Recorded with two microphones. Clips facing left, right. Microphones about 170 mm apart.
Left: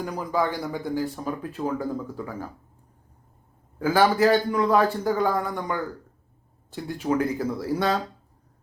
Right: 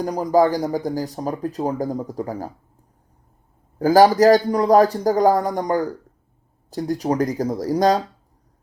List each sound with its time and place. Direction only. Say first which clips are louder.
0.0 s speech: right 9 dB; 40° right (ahead or behind)
3.8 s speech: right 7 dB; 40° right (ahead or behind)